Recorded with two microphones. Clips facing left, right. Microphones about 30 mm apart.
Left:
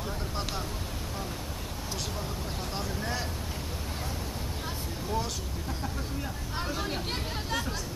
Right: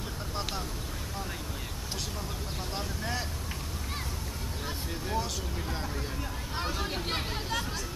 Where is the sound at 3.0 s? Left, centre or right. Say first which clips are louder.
Even; centre.